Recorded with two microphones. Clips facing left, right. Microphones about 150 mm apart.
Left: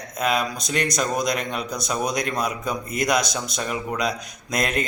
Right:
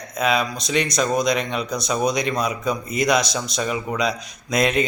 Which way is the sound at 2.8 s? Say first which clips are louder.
Right 3 dB; 50° left (ahead or behind).